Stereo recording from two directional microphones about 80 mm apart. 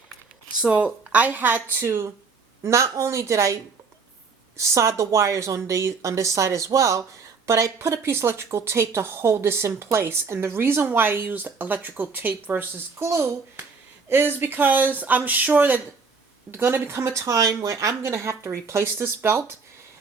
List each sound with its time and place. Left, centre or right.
0.6 s speech: centre
1.8 s a woman's voice: right
13.1 s a woman's voice: right